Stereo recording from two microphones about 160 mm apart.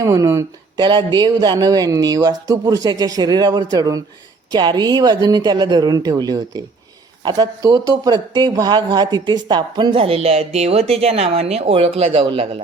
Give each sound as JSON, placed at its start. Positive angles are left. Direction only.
{"t": 0.0, "sound": "speech", "side_deg": -20}